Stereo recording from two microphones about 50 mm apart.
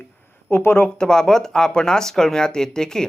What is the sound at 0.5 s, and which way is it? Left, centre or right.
Speech, left.